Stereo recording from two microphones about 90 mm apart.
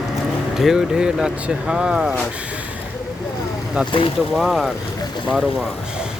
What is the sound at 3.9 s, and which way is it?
Speech, 75° left (ahead or behind).